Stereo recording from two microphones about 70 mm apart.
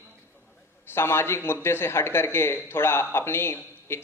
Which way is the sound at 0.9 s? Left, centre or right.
Left.